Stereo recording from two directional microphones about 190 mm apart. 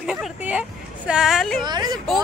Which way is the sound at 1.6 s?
20° right (ahead or behind).